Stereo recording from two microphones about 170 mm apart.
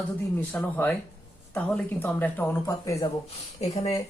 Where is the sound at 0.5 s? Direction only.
10° left (ahead or behind).